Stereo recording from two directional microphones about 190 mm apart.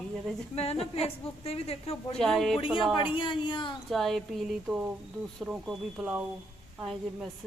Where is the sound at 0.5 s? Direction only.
35° left (ahead or behind).